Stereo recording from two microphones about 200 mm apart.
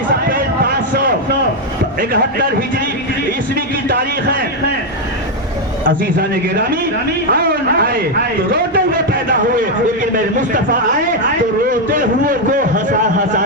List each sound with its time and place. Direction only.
0.3 s a sound: 45° right (ahead or behind)
2.0 s a man's voice: 45° right (ahead or behind)
6.0 s a man's voice: 50° right (ahead or behind)
11.7 s a man's voice: 40° right (ahead or behind)